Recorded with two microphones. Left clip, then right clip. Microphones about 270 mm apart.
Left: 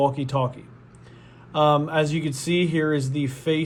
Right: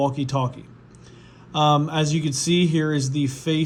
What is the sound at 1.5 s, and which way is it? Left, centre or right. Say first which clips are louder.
Speech: even; right.